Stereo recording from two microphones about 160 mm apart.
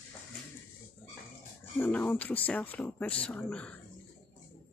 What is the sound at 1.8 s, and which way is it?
Speech, 10° left (ahead or behind).